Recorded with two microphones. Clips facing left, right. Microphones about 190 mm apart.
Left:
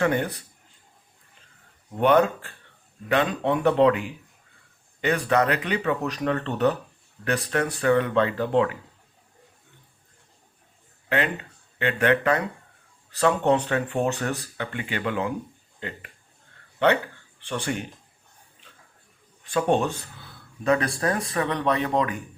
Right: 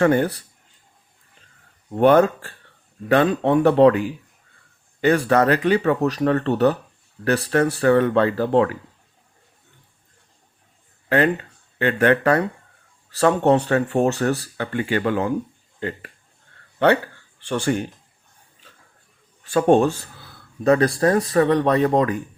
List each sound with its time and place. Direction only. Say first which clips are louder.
0.0 s speech: right 6 dB; 40° right (ahead or behind)
2.0 s speech: right 5 dB; 40° right (ahead or behind)
11.8 s speech: right 4 dB; 40° right (ahead or behind)
17.7 s speech: right 8 dB; 40° right (ahead or behind)
19.5 s speech: right 7 dB; 45° right (ahead or behind)